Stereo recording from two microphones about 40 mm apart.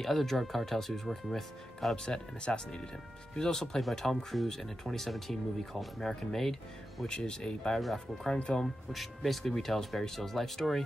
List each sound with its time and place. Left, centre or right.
0.0 s speech: centre
2.0 s speech: left; by 6.5 s centre
7.1 s speech: centre
7.8 s speech: centre
8.4 s speech: left
8.9 s speech: centre